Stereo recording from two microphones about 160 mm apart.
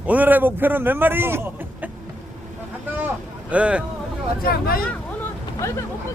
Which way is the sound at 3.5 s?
10° right (ahead or behind).